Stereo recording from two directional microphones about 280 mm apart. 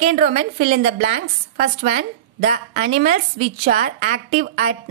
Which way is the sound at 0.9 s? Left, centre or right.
Right.